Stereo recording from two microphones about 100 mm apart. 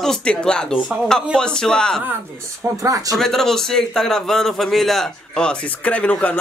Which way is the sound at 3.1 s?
5° left (ahead or behind).